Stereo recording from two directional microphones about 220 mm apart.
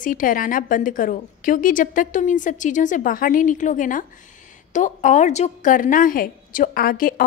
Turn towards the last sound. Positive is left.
turn(degrees=40)  # may be behind; listen again after turning